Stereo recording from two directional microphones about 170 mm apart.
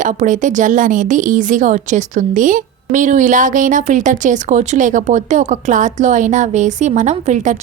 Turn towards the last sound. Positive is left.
turn(degrees=-45)  # may be behind; listen again after turning